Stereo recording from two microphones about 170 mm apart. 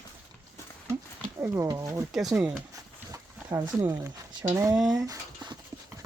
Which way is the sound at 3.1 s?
20° right (ahead or behind).